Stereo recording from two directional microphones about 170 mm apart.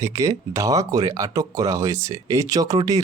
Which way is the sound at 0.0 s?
20° right (ahead or behind).